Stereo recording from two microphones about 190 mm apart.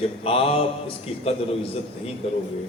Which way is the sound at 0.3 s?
30° left (ahead or behind).